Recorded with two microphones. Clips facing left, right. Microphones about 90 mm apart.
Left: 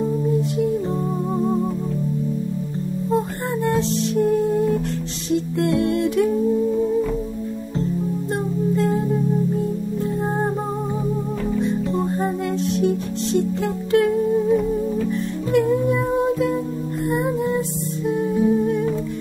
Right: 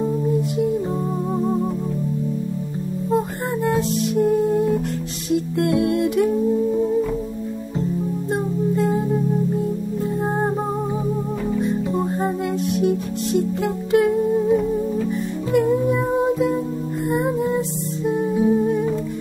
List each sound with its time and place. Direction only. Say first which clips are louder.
3.6 s music: even; 10° right (ahead or behind)
8.3 s music: right 2 dB; 10° right (ahead or behind)
10.2 s music: right 2 dB; 15° right (ahead or behind)
11.5 s music: even; 10° right (ahead or behind)